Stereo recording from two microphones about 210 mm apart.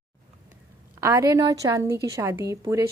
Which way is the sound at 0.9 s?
15° right (ahead or behind).